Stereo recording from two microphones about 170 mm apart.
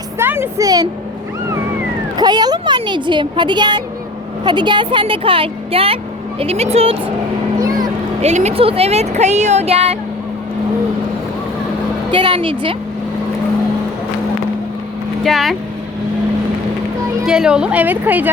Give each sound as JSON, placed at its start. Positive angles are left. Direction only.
{"t": 0.2, "sound": "speech", "side_deg": -15}
{"t": 2.1, "sound": "speech", "side_deg": -25}
{"t": 8.2, "sound": "speech", "side_deg": -40}
{"t": 12.1, "sound": "speech", "side_deg": -30}
{"t": 15.2, "sound": "speech", "side_deg": 0}
{"t": 17.2, "sound": "a woman's voice", "side_deg": -5}